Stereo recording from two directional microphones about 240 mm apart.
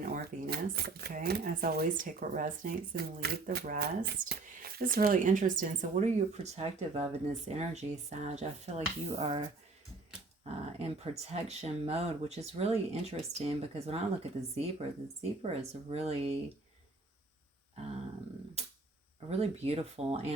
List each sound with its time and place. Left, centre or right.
0.0 s speech: right
10.8 s speech: right
15.9 s speech: right
19.3 s speech: right